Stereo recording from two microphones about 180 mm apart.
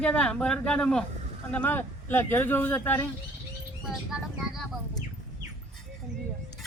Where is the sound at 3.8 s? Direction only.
Centre (ahead or behind).